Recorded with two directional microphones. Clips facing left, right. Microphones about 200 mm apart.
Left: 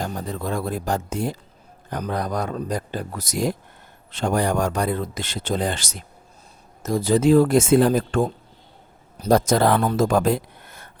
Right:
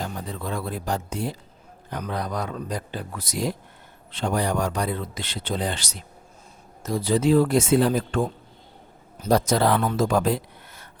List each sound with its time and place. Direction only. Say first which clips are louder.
0.0 s speech: left 4 dB; 45° left (ahead or behind)